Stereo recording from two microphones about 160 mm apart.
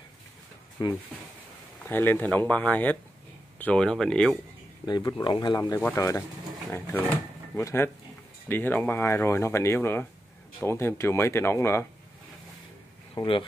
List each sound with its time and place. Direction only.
0.8 s speech: 25° left (ahead or behind)
1.9 s speech: 10° left (ahead or behind)
4.8 s speech: 25° left (ahead or behind)
7.5 s speech: 15° left (ahead or behind)
13.1 s speech: 30° left (ahead or behind)